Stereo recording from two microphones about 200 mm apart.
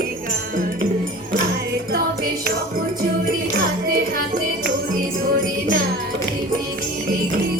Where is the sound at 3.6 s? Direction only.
50° right (ahead or behind).